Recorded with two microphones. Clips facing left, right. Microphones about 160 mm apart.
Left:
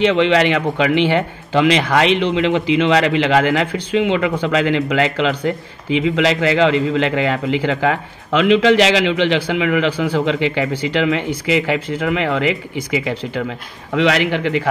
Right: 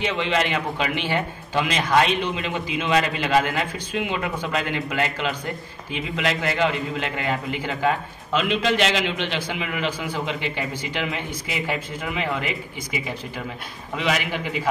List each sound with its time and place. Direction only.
0.0 s speech: 85° left